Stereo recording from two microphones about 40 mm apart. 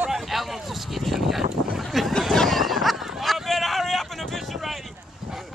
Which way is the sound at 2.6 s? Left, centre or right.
Centre.